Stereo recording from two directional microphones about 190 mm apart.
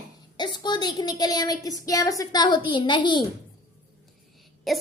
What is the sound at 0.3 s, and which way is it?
Speech, 20° left (ahead or behind).